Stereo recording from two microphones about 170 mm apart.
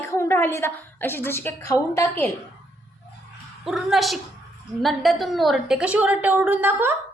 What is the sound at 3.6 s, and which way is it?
A woman's voice, centre (ahead or behind).